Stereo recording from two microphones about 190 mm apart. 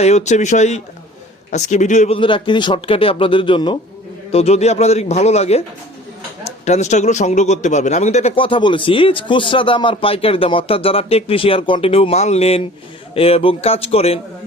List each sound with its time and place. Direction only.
0.0 s a man's voice: 35° left (ahead or behind)
6.7 s a man's voice: 35° left (ahead or behind)